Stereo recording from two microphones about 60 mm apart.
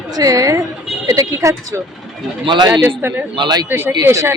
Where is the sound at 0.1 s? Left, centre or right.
Right.